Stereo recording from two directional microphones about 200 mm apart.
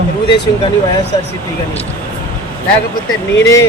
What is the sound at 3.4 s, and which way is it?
Speech, 15° left (ahead or behind).